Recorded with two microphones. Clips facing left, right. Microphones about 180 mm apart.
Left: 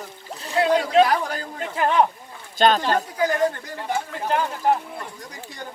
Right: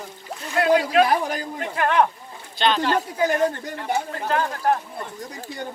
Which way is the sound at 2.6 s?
45° left (ahead or behind).